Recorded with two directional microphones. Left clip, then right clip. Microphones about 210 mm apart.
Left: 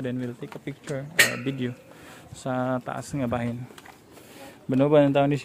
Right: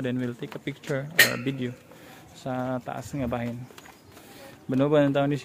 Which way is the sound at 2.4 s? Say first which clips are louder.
Left 3 dB; 15° left (ahead or behind).